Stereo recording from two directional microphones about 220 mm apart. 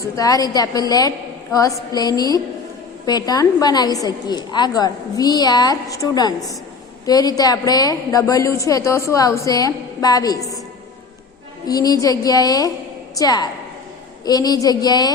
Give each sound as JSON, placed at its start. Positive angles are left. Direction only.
{"t": 0.0, "sound": "a woman's voice", "side_deg": 15}
{"t": 11.6, "sound": "a woman's voice", "side_deg": 15}